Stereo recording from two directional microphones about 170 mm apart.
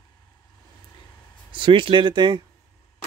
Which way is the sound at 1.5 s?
30° right (ahead or behind).